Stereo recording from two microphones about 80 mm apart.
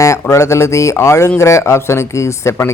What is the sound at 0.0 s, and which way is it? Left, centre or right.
Speech, left.